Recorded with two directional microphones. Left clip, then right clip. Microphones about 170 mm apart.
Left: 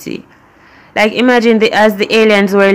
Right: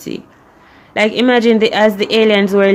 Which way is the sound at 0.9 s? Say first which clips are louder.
Left 2 dB; 10° left (ahead or behind).